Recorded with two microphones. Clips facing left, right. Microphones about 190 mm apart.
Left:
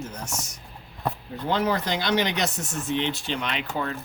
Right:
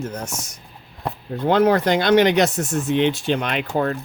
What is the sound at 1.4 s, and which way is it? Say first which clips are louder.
Speech: right 8 dB; 55° right (ahead or behind).